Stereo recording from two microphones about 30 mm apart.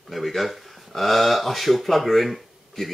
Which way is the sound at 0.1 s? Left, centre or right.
Centre.